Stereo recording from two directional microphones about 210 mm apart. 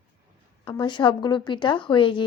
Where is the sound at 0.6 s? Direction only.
25° left (ahead or behind).